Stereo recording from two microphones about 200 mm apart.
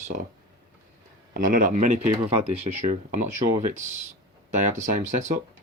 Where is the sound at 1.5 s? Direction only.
40° right (ahead or behind).